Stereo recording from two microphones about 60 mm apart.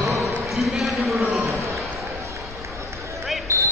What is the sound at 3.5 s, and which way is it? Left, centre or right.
Basketball bounce, right.